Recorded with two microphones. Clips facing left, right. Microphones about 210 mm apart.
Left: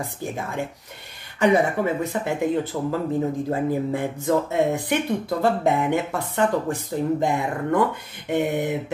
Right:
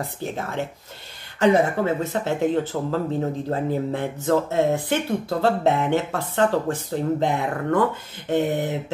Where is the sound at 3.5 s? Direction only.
10° left (ahead or behind).